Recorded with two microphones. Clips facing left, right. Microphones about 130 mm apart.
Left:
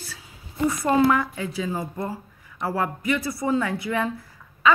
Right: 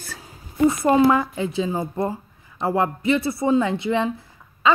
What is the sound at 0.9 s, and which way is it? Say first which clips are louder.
A woman's voice: right 1 dB; 25° right (ahead or behind).